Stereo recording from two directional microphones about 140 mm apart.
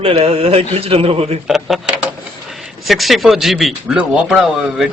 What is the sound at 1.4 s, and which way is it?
Speech, centre (ahead or behind).